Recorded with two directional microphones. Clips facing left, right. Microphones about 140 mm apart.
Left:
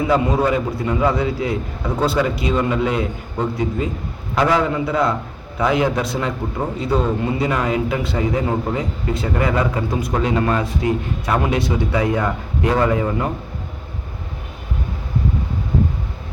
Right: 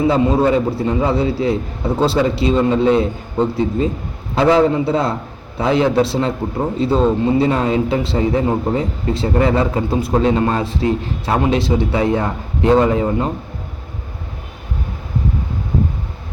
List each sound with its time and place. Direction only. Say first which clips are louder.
0.1 s speech: right 3 dB; 30° right (ahead or behind)